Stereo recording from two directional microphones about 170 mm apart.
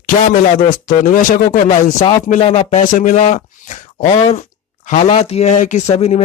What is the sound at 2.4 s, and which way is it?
Speech, 40° left (ahead or behind).